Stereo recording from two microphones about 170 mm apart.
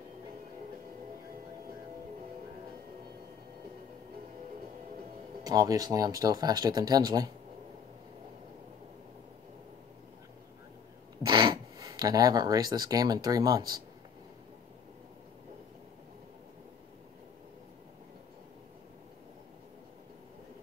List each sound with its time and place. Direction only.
5.4 s speech: 20° right (ahead or behind)
11.2 s speech: 25° right (ahead or behind)